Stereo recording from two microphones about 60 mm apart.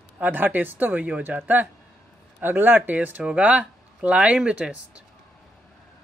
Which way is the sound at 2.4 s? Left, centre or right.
Right.